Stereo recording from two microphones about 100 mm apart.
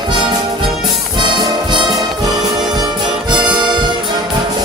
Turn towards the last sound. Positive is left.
turn(degrees=-50)  # may be behind; listen again after turning